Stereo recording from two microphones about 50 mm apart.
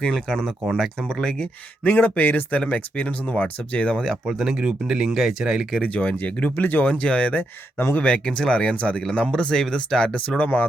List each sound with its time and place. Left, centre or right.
0.0 s speech: centre
1.8 s speech: left
4.3 s speech: centre
5.8 s speech: left
6.9 s speech: left
9.0 s speech: centre; by 10.7 s left